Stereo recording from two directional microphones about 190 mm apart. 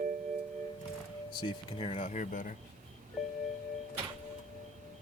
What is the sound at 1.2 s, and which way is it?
Speech, 25° left (ahead or behind).